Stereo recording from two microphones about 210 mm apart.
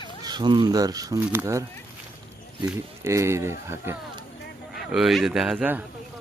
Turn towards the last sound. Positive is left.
turn(degrees=-5)  # may be behind; listen again after turning